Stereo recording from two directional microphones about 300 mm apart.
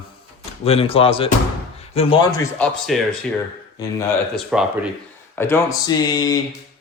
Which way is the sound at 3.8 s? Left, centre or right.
Centre.